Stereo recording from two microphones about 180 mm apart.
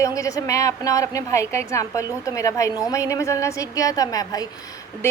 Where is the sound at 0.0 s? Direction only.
20° left (ahead or behind).